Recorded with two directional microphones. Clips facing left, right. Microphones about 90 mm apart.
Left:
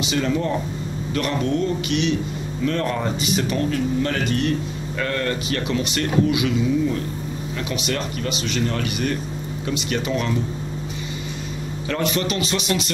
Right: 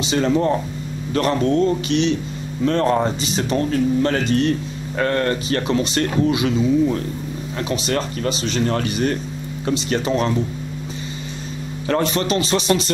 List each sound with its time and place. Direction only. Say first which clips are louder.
0.0 s speech: right 4 dB; 35° right (ahead or behind)
11.9 s speech: right 4 dB; 35° right (ahead or behind)